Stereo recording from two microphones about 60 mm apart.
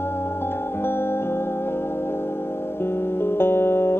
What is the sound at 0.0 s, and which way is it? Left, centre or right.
Music, left.